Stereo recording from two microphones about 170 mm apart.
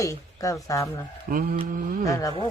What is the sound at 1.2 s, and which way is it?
Mantra, 55° right (ahead or behind).